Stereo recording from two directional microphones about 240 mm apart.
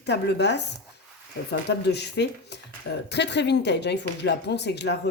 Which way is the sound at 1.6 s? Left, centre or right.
Left.